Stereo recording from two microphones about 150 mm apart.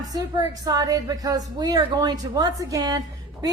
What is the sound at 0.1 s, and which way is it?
Speech, 25° right (ahead or behind).